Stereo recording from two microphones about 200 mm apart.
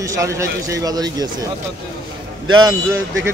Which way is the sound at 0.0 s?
15° right (ahead or behind).